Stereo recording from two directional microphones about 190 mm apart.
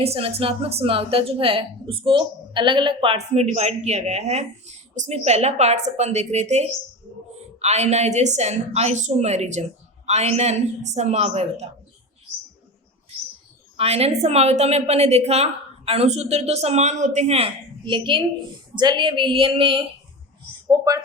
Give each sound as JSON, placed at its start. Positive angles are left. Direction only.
{"t": 0.0, "sound": "a woman's voice", "side_deg": -30}
{"t": 13.7, "sound": "a woman's voice", "side_deg": -35}